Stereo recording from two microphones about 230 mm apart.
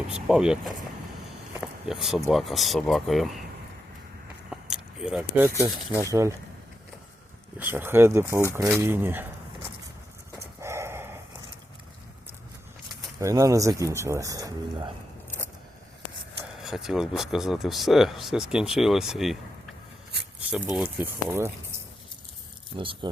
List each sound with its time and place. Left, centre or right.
0.1 s speech: centre
1.5 s a sound: centre
2.3 s speech: centre
4.4 s a sound: centre
6.0 s speech: centre
7.6 s speech: centre
10.6 s dog: centre
13.1 s speech: centre
16.6 s speech: centre
20.5 s speech: centre
22.8 s speech: right